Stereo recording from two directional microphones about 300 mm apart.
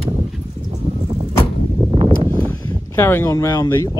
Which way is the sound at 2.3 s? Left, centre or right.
Centre.